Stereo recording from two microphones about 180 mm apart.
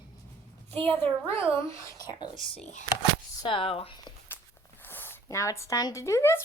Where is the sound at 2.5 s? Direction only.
40° left (ahead or behind).